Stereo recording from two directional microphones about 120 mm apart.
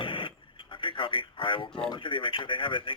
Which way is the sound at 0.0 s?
45° left (ahead or behind).